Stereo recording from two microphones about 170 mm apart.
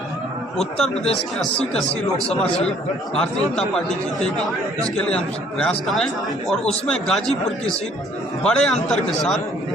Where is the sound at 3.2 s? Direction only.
5° left (ahead or behind).